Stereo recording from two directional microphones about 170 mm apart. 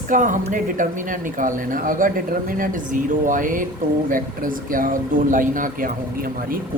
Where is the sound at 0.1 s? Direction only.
50° right (ahead or behind).